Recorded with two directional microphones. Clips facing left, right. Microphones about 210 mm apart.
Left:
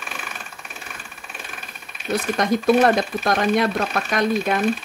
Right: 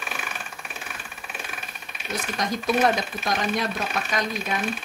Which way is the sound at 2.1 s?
60° left (ahead or behind).